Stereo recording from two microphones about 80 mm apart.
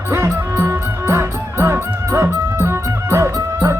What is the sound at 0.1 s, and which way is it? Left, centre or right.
Music, right.